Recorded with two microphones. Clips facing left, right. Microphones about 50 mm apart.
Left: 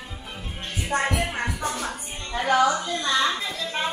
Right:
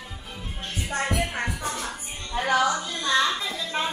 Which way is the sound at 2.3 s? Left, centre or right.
Centre.